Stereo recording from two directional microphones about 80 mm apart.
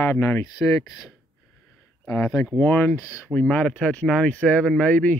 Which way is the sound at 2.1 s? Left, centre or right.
Left.